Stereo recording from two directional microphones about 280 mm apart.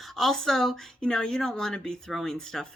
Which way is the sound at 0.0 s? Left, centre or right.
Centre.